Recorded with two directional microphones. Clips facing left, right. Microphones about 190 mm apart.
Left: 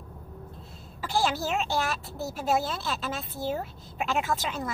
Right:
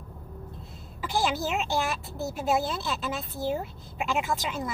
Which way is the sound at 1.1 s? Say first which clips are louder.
Even; 15° right (ahead or behind).